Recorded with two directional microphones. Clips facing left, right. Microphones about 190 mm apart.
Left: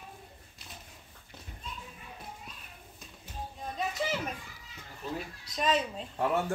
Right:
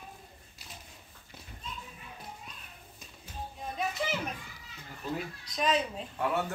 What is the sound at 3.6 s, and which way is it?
Children playing, centre (ahead or behind).